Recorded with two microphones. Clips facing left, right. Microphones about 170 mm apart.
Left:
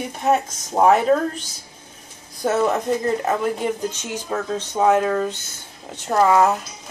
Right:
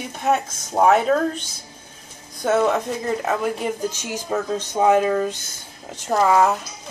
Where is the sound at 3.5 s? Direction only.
5° right (ahead or behind).